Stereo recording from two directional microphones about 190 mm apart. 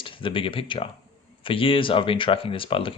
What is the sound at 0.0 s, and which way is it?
Speech, 25° left (ahead or behind).